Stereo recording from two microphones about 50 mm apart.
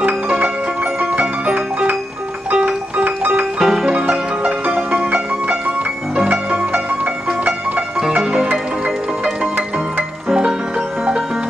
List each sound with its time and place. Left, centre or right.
1.2 s music: right
3.5 s music: centre
4.4 s music: right
6.2 s music: right
8.2 s music: centre